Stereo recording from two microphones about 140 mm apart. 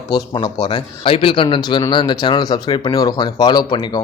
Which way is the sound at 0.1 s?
30° left (ahead or behind).